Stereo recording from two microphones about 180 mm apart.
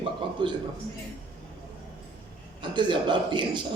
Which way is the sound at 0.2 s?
25° right (ahead or behind).